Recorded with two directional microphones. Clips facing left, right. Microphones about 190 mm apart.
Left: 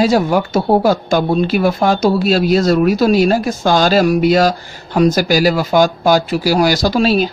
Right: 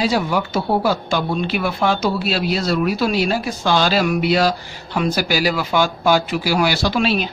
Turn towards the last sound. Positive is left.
turn(degrees=40)  # may be behind; listen again after turning